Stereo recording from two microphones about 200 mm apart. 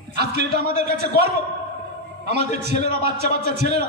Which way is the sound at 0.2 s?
55° right (ahead or behind).